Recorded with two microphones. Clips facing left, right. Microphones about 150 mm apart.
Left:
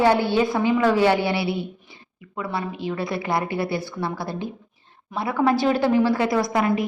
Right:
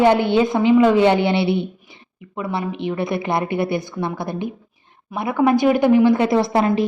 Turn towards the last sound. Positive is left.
turn(degrees=-30)  # may be behind; listen again after turning